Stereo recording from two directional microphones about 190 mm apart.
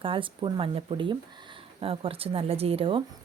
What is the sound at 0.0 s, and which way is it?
Speech, 25° right (ahead or behind).